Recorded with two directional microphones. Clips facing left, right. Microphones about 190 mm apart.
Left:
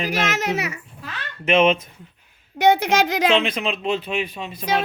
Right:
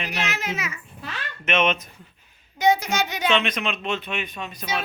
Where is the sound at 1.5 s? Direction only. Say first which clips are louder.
Left 6 dB; 30° left (ahead or behind).